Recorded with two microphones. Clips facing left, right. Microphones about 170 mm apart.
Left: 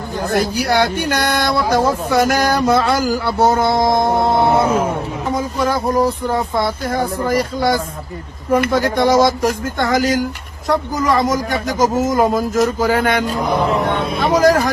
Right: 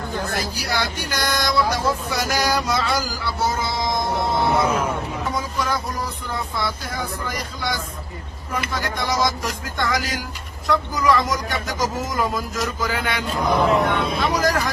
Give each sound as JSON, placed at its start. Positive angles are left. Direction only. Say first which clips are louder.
{"t": 0.2, "sound": "speech", "louder": "left 13 dB", "side_deg": 55}